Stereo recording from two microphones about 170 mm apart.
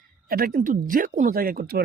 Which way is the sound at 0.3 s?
60° right (ahead or behind).